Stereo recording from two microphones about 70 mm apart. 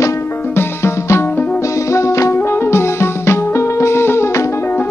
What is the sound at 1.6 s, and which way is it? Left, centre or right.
Music, left.